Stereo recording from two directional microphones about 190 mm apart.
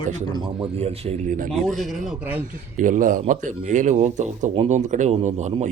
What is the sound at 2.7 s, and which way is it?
Speech, 45° right (ahead or behind).